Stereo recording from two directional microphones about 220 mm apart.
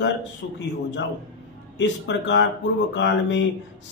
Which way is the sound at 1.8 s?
55° left (ahead or behind).